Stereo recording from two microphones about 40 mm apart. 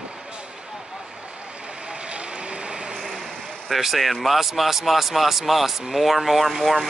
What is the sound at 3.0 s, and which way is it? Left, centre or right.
Vehicle, centre.